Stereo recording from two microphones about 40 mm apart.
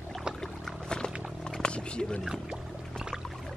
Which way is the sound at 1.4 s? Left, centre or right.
Left.